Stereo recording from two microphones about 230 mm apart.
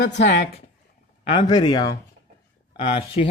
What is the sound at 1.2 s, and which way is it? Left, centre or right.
Speech, left.